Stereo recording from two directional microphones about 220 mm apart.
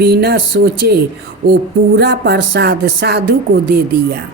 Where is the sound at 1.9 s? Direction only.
50° right (ahead or behind).